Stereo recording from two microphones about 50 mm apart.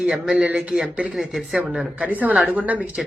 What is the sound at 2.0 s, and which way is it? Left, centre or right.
Speech, right.